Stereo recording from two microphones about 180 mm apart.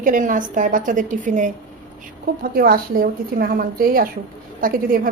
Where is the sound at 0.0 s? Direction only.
45° right (ahead or behind).